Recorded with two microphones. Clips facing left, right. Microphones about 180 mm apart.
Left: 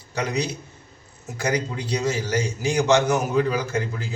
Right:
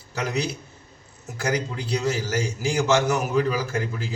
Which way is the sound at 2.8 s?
Centre (ahead or behind).